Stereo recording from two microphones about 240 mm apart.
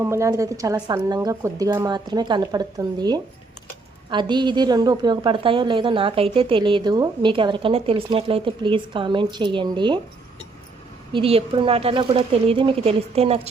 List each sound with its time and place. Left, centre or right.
0.0 s a woman's voice: centre
11.1 s a woman's voice: right